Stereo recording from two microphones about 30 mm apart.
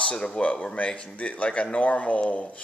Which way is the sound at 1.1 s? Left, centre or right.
Left.